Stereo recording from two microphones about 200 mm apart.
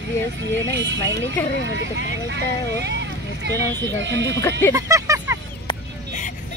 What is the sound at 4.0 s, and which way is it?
Speech, 60° right (ahead or behind).